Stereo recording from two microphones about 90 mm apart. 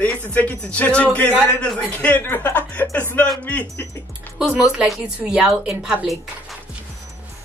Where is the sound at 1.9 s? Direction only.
20° left (ahead or behind).